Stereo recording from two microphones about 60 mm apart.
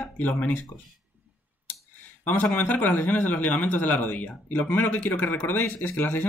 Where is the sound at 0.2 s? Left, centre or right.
Left.